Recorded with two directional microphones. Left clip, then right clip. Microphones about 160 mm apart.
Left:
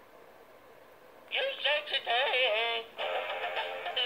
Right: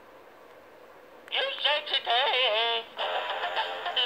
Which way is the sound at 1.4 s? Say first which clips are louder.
Right 3 dB; 10° right (ahead or behind).